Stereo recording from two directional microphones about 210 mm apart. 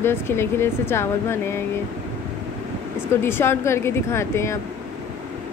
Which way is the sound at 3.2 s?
10° left (ahead or behind).